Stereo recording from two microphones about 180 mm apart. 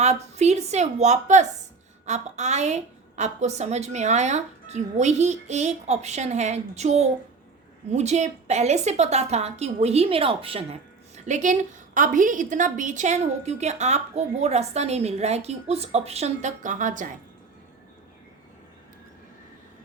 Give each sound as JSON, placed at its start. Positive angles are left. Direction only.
{"t": 0.0, "sound": "a woman's voice", "side_deg": -40}